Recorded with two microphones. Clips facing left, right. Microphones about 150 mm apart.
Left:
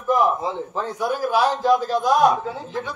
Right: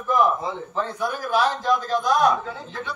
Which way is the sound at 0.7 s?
10° left (ahead or behind).